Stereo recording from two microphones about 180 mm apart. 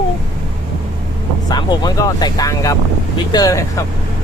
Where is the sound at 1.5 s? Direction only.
20° left (ahead or behind).